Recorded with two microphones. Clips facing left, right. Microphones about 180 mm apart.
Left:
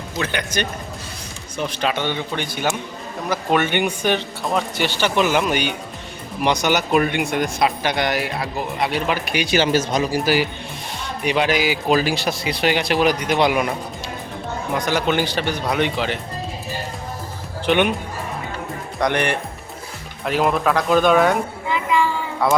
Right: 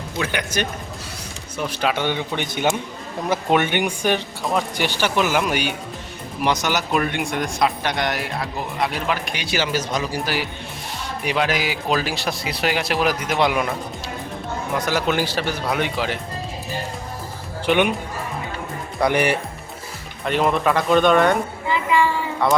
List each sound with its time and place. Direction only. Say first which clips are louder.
0.2 s a man's voice: even; 10° right (ahead or behind); by 9.6 s 10° left (ahead or behind)
9.6 s speech: left 4 dB; 25° left (ahead or behind)
10.1 s speech: left 6 dB; 5° left (ahead or behind)
14.8 s speech: left 1 dB; 5° right (ahead or behind)
17.7 s speech: left 1 dB; 5° right (ahead or behind)
18.9 s a man's voice: right 1 dB; 5° right (ahead or behind)